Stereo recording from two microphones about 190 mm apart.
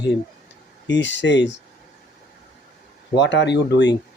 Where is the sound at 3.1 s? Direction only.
65° left (ahead or behind).